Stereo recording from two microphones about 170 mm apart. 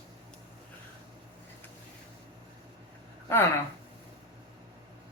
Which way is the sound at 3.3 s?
15° left (ahead or behind).